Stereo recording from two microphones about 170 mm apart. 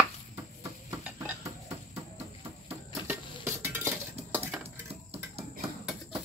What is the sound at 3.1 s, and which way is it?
Cutlery, 10° right (ahead or behind).